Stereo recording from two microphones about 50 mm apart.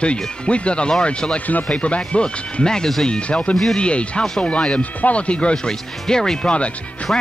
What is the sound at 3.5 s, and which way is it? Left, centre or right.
Speech, centre.